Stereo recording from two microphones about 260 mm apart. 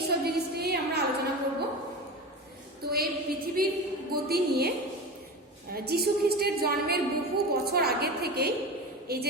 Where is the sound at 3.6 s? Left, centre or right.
Right.